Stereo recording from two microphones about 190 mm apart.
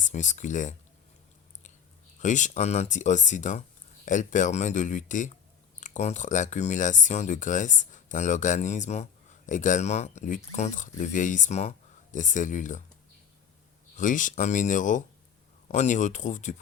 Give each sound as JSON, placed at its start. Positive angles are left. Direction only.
{"t": 0.0, "sound": "speech", "side_deg": 40}
{"t": 2.2, "sound": "speech", "side_deg": 40}
{"t": 13.9, "sound": "speech", "side_deg": 45}